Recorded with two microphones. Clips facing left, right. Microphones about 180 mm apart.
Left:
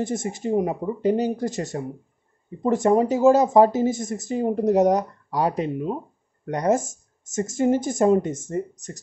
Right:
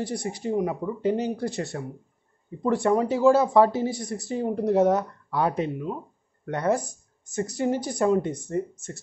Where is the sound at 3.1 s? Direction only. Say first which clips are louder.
Left 1 dB; 40° left (ahead or behind).